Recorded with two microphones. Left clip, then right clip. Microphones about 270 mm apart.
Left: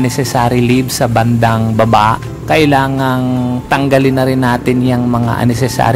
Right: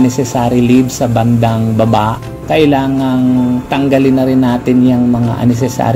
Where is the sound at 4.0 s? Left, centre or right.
Left.